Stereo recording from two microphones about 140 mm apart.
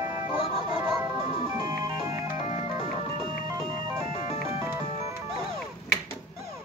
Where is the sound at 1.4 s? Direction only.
20° right (ahead or behind).